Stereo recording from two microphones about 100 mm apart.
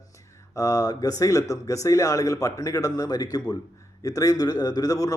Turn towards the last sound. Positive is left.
turn(degrees=35)  # may be behind; listen again after turning